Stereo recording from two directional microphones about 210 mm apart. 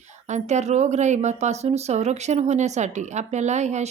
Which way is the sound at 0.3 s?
35° right (ahead or behind).